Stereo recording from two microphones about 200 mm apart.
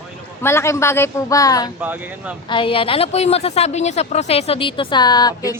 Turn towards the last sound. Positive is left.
turn(degrees=20)  # may be behind; listen again after turning